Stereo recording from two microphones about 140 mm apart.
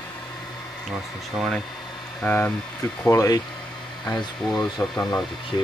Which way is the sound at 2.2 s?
10° left (ahead or behind).